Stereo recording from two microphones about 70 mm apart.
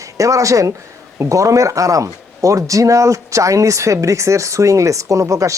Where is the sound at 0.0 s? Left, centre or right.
Right.